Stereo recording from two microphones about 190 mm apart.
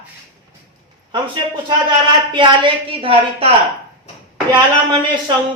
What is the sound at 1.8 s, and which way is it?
A woman's voice, 25° right (ahead or behind).